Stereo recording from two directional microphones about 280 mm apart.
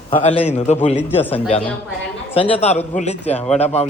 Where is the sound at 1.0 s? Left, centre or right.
Centre.